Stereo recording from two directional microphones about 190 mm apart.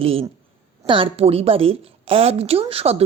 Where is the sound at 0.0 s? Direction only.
30° right (ahead or behind).